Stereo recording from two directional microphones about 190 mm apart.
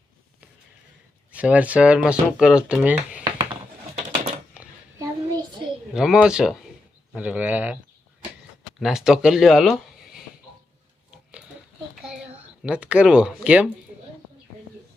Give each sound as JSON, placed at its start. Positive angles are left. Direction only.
{"t": 1.3, "sound": "speech", "side_deg": -5}
{"t": 4.6, "sound": "a sound", "side_deg": -5}
{"t": 4.9, "sound": "child singing", "side_deg": -20}
{"t": 5.9, "sound": "speech", "side_deg": -5}
{"t": 8.8, "sound": "speech", "side_deg": 0}
{"t": 12.6, "sound": "speech", "side_deg": -5}